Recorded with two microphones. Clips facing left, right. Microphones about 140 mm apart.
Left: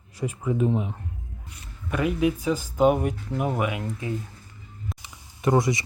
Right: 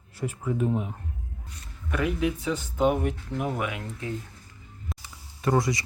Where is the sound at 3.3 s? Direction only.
40° left (ahead or behind).